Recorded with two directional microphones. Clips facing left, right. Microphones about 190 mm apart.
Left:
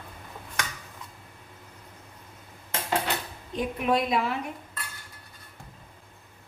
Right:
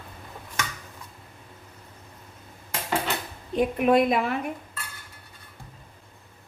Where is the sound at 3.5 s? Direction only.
55° right (ahead or behind).